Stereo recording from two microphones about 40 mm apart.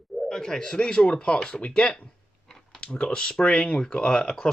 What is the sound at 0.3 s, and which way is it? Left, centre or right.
Speech, centre.